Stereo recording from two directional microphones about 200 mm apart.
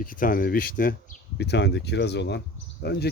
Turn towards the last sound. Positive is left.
turn(degrees=55)  # may be behind; listen again after turning